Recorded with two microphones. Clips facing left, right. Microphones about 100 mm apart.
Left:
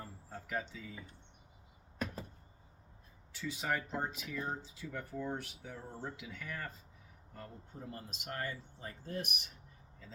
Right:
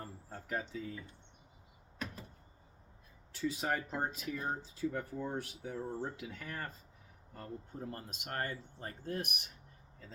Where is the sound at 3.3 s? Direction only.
45° right (ahead or behind).